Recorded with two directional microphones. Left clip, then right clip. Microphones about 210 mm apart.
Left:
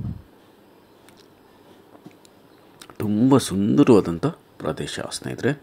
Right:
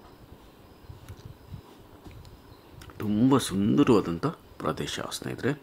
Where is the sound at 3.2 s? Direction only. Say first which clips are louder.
Left 5 dB; 15° left (ahead or behind).